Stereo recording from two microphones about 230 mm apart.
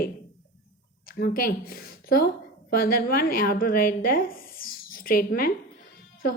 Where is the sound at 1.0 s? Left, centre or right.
Left.